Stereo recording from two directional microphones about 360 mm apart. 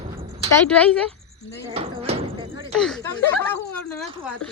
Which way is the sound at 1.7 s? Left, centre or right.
Centre.